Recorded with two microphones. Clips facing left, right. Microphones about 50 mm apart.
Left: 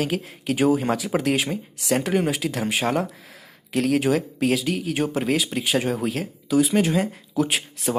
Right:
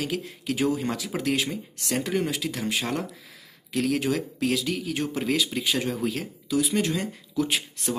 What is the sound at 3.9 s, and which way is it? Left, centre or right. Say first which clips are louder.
Speech: left 5 dB; left.